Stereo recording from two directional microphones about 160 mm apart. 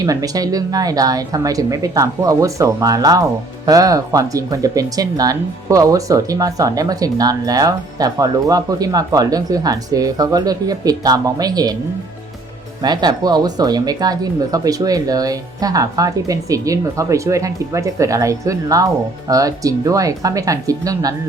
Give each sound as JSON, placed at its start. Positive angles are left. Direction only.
{"t": 0.0, "sound": "speech", "side_deg": -20}
{"t": 12.8, "sound": "speech", "side_deg": -25}